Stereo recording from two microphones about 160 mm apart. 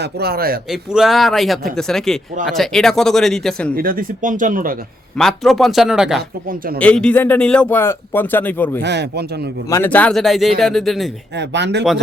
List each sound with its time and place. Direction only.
0.0 s a man's voice: 75° right (ahead or behind)
0.7 s speech: 5° right (ahead or behind)
3.8 s speech: 65° right (ahead or behind)
5.1 s speech: centre (ahead or behind)
8.8 s speech: 90° right
9.6 s speech: 15° left (ahead or behind)
11.3 s speech: 90° right